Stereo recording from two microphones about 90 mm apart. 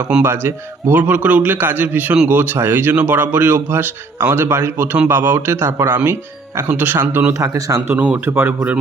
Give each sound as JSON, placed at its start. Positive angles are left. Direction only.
{"t": 0.3, "sound": "speech", "side_deg": -25}
{"t": 7.9, "sound": "speech", "side_deg": -15}